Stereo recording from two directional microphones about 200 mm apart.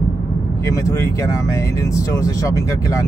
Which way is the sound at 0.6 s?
15° left (ahead or behind).